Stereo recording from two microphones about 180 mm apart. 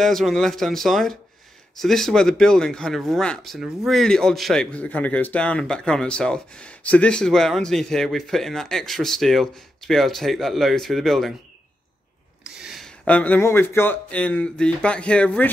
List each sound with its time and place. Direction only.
0.0 s speech: centre (ahead or behind)
12.4 s speech: 5° right (ahead or behind)